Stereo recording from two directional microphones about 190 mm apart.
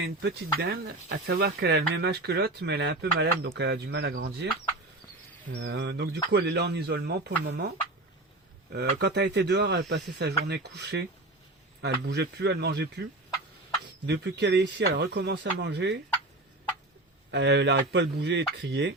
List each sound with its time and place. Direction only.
0.0 s speech: 60° right (ahead or behind)
5.5 s speech: 65° right (ahead or behind)
8.7 s speech: 60° right (ahead or behind)
14.1 s speech: 65° right (ahead or behind)
17.3 s speech: 65° right (ahead or behind)